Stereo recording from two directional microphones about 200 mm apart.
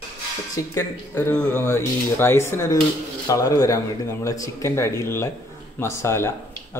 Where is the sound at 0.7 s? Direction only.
10° left (ahead or behind).